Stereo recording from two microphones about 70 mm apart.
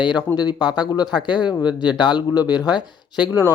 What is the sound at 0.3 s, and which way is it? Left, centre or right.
Speech, left.